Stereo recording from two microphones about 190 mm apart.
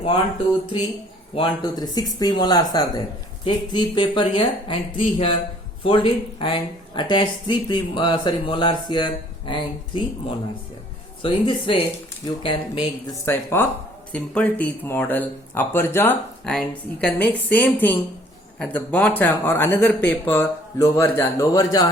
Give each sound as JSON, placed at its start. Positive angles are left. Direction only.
{"t": 1.4, "sound": "speech", "side_deg": 25}
{"t": 11.2, "sound": "speech", "side_deg": 25}
{"t": 13.2, "sound": "speech", "side_deg": 10}